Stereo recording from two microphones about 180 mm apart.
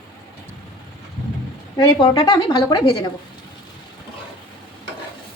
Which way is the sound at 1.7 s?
25° left (ahead or behind).